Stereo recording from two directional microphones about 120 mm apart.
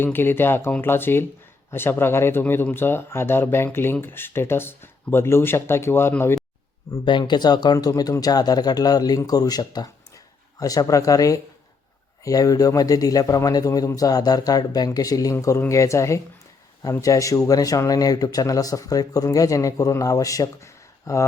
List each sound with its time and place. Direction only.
0.0 s speech: 20° left (ahead or behind)
7.0 s a man's voice: 40° left (ahead or behind); by 21.2 s 25° left (ahead or behind)